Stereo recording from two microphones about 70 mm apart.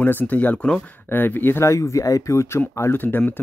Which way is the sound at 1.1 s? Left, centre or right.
Left.